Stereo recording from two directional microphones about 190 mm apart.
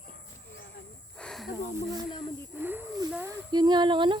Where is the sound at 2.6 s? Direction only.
10° right (ahead or behind).